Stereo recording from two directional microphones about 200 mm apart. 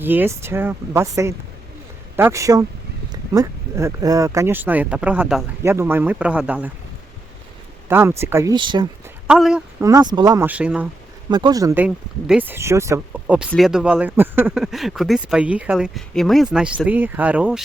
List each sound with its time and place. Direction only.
0.0 s speech: 10° right (ahead or behind)
7.9 s speech: 10° right (ahead or behind)
9.2 s speech: 5° right (ahead or behind)
9.8 s speech: 20° right (ahead or behind)
11.3 s speech: 20° right (ahead or behind); by 17.6 s 5° right (ahead or behind)